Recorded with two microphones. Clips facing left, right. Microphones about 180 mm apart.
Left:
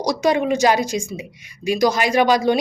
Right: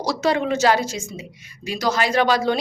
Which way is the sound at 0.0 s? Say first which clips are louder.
Left 3 dB; 15° left (ahead or behind).